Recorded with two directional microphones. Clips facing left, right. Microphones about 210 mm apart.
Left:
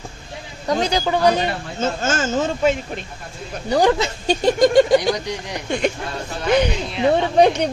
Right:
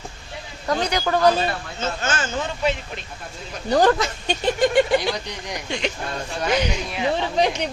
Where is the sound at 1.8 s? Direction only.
45° left (ahead or behind).